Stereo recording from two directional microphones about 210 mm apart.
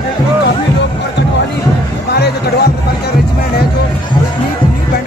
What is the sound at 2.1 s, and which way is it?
Music, 50° left (ahead or behind).